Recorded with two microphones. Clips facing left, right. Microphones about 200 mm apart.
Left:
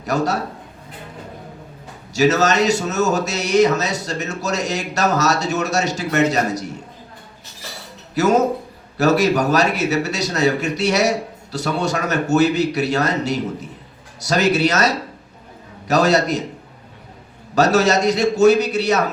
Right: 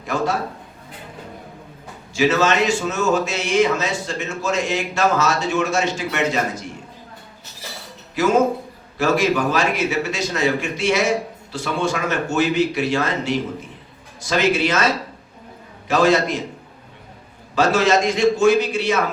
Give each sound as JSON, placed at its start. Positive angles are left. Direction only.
{"t": 2.1, "sound": "a man's voice", "side_deg": 40}
{"t": 8.1, "sound": "a man's voice", "side_deg": 40}
{"t": 17.5, "sound": "a man's voice", "side_deg": 40}